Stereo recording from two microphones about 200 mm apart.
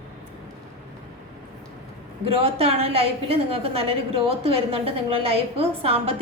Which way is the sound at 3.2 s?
30° right (ahead or behind).